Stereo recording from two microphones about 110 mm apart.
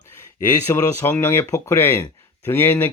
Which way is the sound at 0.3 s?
25° left (ahead or behind).